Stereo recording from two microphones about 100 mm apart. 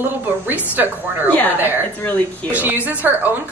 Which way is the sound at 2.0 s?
15° left (ahead or behind).